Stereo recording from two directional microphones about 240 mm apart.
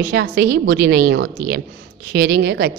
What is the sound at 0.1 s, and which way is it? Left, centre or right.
A woman's voice, right.